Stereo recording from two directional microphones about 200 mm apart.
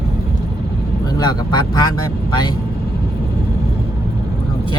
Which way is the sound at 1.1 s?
20° left (ahead or behind).